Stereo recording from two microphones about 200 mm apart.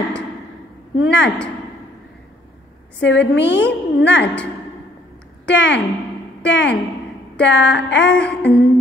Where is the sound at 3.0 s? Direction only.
60° left (ahead or behind).